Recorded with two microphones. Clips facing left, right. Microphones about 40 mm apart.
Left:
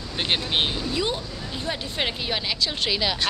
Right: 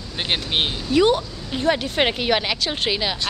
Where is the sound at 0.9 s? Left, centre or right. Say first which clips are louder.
Right 9 dB; right.